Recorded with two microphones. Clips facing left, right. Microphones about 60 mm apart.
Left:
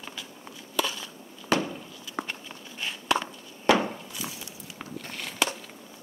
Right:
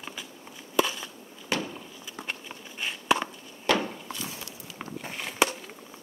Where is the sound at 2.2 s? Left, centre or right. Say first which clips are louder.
Left 3 dB; left.